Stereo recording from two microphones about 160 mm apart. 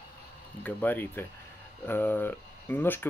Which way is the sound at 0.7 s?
10° left (ahead or behind).